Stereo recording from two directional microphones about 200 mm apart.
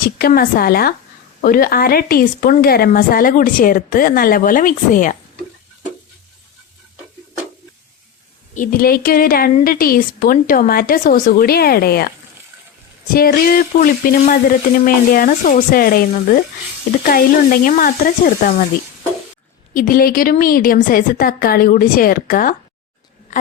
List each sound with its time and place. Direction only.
0.0 s a woman's voice: 45° left (ahead or behind)
8.5 s a woman's voice: 45° left (ahead or behind)
13.1 s a woman's voice: 45° left (ahead or behind)
19.7 s a woman's voice: 45° left (ahead or behind)